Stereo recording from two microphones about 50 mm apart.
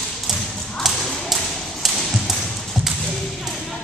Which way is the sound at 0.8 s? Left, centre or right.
Centre.